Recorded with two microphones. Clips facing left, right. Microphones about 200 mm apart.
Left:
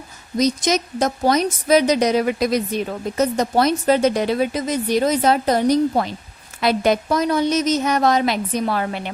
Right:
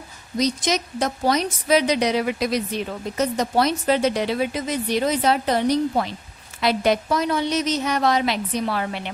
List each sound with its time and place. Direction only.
0.3 s a woman's voice: 45° left (ahead or behind)